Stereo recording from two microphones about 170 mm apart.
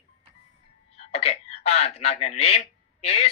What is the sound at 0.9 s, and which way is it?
Speech, 35° left (ahead or behind).